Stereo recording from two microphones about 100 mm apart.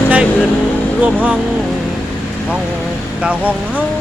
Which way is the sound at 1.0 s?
10° right (ahead or behind).